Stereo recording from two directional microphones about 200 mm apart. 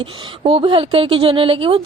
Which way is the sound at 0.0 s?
25° right (ahead or behind).